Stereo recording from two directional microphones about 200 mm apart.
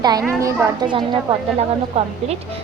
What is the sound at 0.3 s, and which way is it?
A woman's voice, 15° right (ahead or behind).